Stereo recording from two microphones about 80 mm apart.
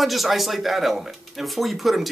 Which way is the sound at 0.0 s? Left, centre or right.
Centre.